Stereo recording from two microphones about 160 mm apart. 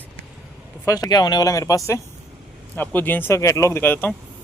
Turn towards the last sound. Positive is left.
turn(degrees=15)  # may be behind; listen again after turning